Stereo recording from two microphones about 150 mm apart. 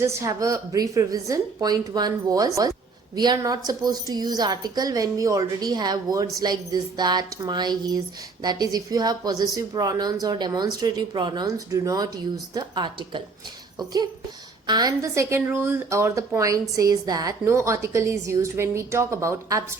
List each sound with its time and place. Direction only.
0.0 s a woman's voice: 20° right (ahead or behind)